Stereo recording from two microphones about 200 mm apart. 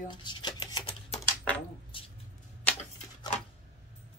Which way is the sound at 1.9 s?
25° left (ahead or behind).